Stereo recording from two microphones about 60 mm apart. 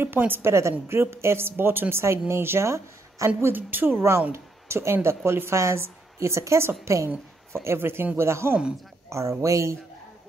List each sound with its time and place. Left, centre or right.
0.0 s a woman's voice: right